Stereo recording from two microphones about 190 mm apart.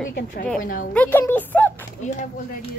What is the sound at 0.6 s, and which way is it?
Speech, 45° left (ahead or behind).